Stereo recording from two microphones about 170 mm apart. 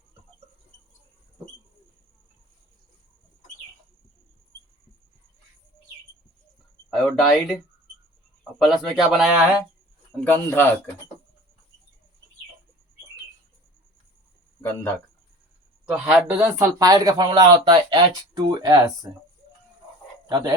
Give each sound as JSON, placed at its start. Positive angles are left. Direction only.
{"t": 7.0, "sound": "speech", "side_deg": 0}
{"t": 8.5, "sound": "a man's voice", "side_deg": 0}
{"t": 10.2, "sound": "speech", "side_deg": 10}
{"t": 14.6, "sound": "speech", "side_deg": 15}
{"t": 15.9, "sound": "speech", "side_deg": -10}
{"t": 20.2, "sound": "speech", "side_deg": -25}